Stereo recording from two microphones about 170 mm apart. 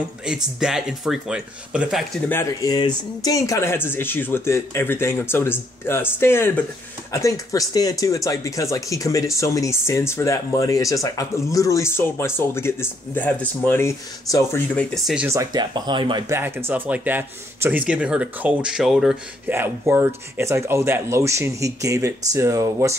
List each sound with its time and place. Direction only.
0.2 s speech: 5° right (ahead or behind)
2.2 s speech: 15° left (ahead or behind)
15.2 s speech: 20° right (ahead or behind)
16.3 s speech: 15° right (ahead or behind)